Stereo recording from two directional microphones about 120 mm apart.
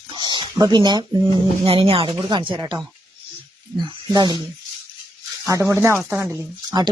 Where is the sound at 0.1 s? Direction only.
40° right (ahead or behind).